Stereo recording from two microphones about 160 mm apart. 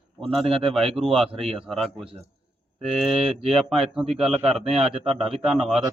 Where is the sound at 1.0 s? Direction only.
Centre (ahead or behind).